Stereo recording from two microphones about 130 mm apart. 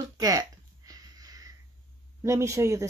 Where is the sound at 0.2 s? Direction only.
30° right (ahead or behind).